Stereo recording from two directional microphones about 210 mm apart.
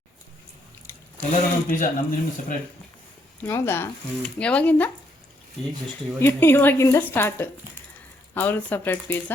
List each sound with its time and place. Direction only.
1.3 s speech: 40° left (ahead or behind)
3.4 s speech: 10° left (ahead or behind)
6.1 s speech: 10° left (ahead or behind)